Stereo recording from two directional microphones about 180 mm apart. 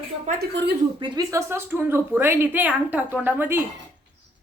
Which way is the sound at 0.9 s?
25° right (ahead or behind).